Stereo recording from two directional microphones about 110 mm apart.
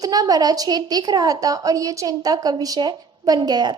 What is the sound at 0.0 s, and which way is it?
A woman's voice, 35° right (ahead or behind).